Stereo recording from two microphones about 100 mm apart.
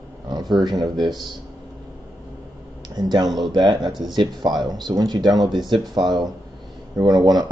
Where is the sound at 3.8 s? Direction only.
Centre (ahead or behind).